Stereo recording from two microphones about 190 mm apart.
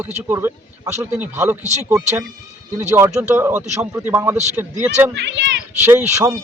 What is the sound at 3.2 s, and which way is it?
Speech, 10° right (ahead or behind).